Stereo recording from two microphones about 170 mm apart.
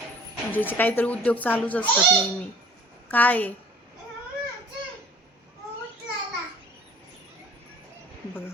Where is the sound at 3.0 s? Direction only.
10° left (ahead or behind).